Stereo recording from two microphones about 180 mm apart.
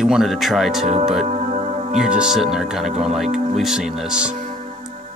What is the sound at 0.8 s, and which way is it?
Speech, 40° right (ahead or behind).